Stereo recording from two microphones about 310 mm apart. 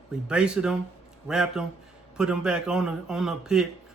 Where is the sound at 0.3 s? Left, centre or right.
Centre.